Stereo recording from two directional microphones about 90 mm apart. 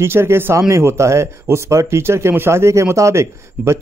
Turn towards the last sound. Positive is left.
turn(degrees=-30)  # may be behind; listen again after turning